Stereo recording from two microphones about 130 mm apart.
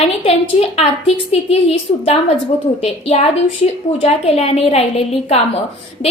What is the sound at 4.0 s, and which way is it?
Speech, 55° left (ahead or behind).